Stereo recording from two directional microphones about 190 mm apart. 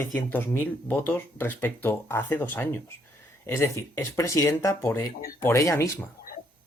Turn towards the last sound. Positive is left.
turn(degrees=15)  # may be behind; listen again after turning